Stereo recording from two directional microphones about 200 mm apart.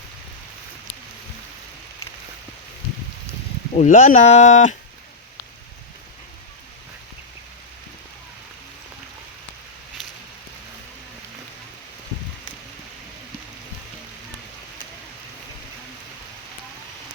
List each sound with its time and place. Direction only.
3.8 s speech: 40° left (ahead or behind)